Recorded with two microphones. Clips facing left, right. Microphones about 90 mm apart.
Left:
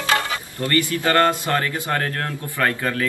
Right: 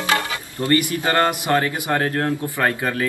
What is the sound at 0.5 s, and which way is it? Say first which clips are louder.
A man's voice: right 3 dB; 20° right (ahead or behind).